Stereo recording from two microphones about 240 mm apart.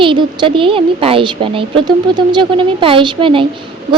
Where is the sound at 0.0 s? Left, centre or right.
Right.